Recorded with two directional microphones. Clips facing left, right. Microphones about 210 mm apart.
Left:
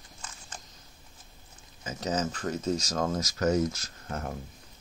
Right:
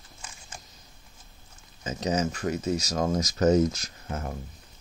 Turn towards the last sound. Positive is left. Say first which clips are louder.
# right 1 dB
turn(degrees=-5)  # may be behind; listen again after turning